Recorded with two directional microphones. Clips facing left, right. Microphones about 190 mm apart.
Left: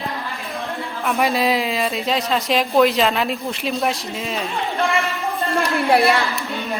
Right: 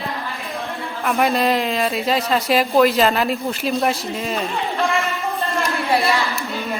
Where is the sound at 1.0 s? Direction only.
Centre (ahead or behind).